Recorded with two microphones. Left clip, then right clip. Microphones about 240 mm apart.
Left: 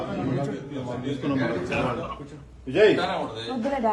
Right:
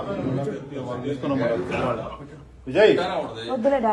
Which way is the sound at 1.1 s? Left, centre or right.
Centre.